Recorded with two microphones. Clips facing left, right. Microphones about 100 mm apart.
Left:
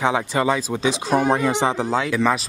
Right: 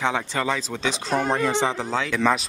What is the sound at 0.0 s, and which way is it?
Speech, 10° left (ahead or behind).